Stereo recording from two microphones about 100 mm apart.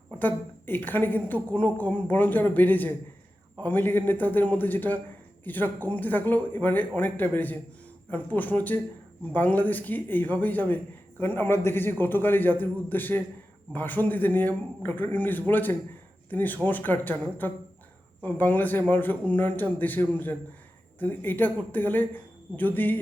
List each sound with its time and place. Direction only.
0.2 s a woman's voice: 20° left (ahead or behind)